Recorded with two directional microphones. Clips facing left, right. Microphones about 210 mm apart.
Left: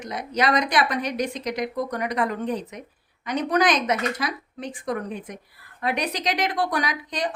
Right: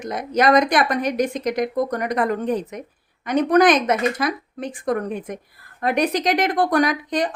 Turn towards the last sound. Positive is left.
turn(degrees=-50)  # may be behind; listen again after turning